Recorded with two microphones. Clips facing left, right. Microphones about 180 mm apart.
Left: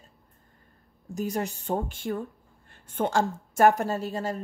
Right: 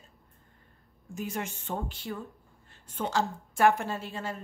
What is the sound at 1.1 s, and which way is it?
Speech, 40° left (ahead or behind).